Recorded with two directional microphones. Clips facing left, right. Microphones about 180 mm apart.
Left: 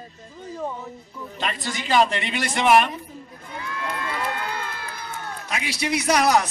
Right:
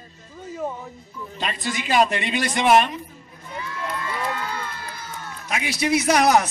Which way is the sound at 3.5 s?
60° left (ahead or behind).